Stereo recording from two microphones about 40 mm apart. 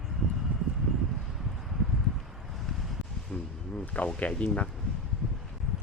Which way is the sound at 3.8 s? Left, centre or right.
Left.